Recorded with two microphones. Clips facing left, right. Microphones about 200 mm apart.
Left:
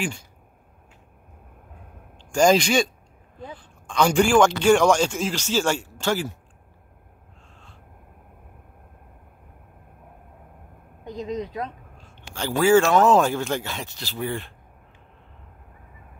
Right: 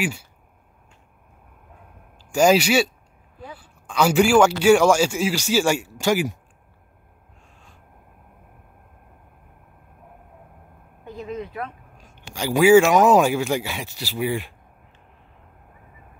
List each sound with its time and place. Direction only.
0.0 s speech: 5° right (ahead or behind)
2.3 s speech: 5° right (ahead or behind)
11.1 s a sound: 20° left (ahead or behind)
12.0 s speech: 10° right (ahead or behind)